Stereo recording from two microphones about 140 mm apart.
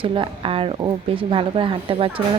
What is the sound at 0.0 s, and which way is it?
Speech, 40° right (ahead or behind).